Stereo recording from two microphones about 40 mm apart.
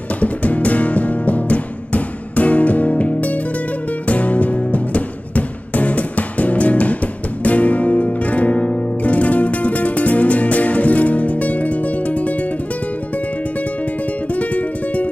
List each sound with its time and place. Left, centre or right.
0.2 s music: left
14.3 s music: left